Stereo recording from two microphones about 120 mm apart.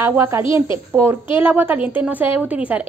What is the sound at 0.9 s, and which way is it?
A woman's voice, 20° right (ahead or behind).